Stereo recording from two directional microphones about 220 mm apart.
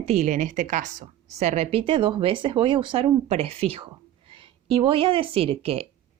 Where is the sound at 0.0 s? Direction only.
30° right (ahead or behind).